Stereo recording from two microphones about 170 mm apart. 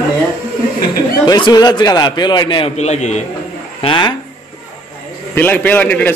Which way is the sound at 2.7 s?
40° left (ahead or behind).